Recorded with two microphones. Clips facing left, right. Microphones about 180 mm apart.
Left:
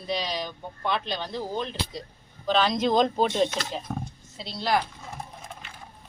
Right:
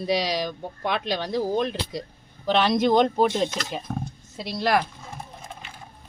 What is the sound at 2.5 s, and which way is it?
Speech, 65° right (ahead or behind).